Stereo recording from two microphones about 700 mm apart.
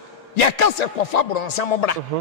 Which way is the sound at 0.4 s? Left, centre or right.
Left.